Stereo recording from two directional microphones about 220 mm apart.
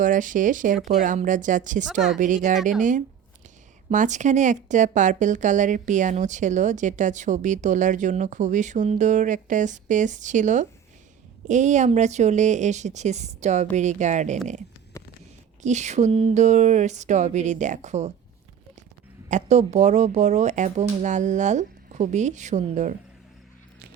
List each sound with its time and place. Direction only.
0.0 s speech: 35° right (ahead or behind)
3.8 s speech: 35° right (ahead or behind)
15.6 s speech: 30° right (ahead or behind)
19.3 s speech: 30° right (ahead or behind)